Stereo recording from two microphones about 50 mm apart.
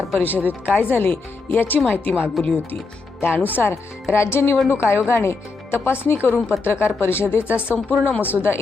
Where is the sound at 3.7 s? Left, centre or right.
Left.